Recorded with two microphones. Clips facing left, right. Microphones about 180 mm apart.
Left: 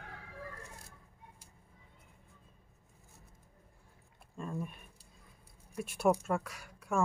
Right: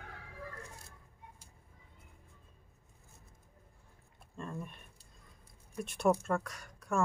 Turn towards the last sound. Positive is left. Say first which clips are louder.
# even
turn(degrees=5)  # may be behind; listen again after turning